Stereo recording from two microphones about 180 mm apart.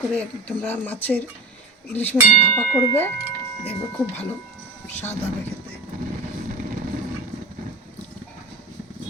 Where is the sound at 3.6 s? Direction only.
10° left (ahead or behind).